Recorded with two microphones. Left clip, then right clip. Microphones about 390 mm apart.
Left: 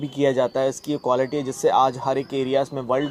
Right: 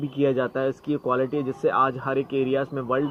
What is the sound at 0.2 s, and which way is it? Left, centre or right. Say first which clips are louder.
A man's voice: left 3 dB; centre.